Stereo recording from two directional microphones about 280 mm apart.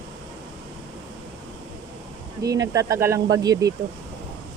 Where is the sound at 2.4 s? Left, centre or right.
Centre.